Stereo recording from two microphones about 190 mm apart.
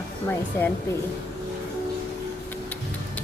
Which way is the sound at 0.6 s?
10° left (ahead or behind).